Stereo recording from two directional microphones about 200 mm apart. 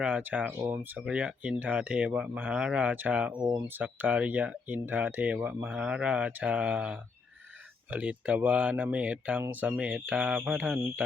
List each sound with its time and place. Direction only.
0.0 s speech: 5° right (ahead or behind)